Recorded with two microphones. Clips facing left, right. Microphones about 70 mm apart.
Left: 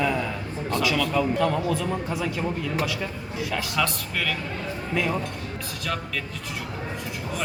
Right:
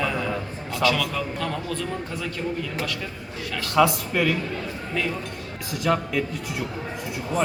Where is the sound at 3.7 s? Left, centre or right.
Centre.